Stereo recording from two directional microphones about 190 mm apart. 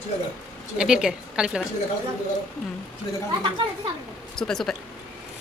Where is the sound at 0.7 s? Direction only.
5° right (ahead or behind).